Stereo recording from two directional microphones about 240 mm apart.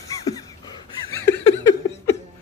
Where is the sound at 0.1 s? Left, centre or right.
Centre.